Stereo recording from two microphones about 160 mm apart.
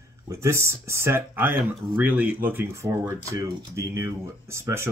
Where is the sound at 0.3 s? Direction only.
20° right (ahead or behind).